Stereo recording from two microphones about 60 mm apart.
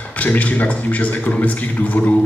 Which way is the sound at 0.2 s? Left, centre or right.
Left.